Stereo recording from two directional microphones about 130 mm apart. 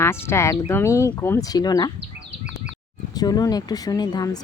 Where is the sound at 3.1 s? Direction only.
30° left (ahead or behind).